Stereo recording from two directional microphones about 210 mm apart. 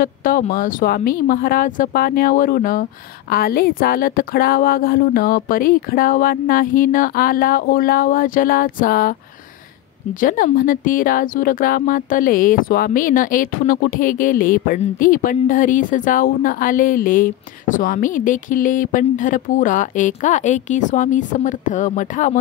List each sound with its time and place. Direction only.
0.0 s speech: 40° left (ahead or behind)
10.2 s a woman's voice: 40° left (ahead or behind)